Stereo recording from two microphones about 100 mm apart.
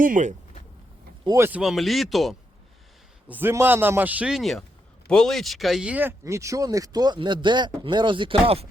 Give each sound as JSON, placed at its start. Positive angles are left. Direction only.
{"t": 1.4, "sound": "speech", "side_deg": -15}
{"t": 1.6, "sound": "speech", "side_deg": 0}
{"t": 3.2, "sound": "a man's voice", "side_deg": -20}
{"t": 4.3, "sound": "speech", "side_deg": 0}
{"t": 5.8, "sound": "speech", "side_deg": -15}